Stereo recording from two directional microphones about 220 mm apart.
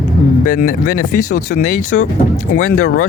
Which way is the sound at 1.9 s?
55° left (ahead or behind).